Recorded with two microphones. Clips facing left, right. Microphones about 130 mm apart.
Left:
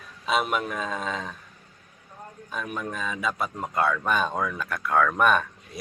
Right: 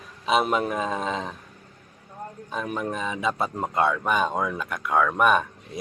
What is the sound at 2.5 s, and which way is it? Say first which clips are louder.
A man's voice: right 3 dB; 20° right (ahead or behind).